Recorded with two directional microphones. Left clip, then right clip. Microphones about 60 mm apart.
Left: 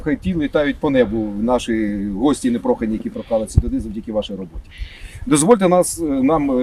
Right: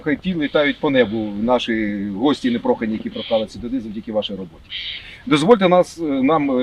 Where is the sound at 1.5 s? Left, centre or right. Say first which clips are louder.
Right 1 dB; left.